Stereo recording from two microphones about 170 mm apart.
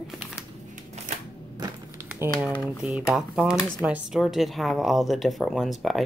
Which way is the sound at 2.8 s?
5° right (ahead or behind).